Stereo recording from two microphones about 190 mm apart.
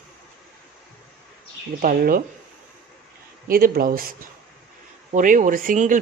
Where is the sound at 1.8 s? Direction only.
50° right (ahead or behind).